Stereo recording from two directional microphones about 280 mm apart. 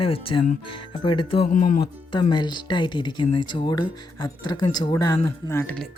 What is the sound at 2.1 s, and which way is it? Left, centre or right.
Speech, centre.